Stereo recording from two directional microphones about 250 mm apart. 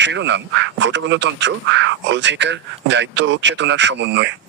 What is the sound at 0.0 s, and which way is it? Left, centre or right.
Speech, right.